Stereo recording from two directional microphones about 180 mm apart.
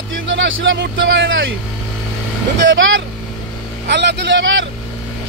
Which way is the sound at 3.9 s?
70° right (ahead or behind).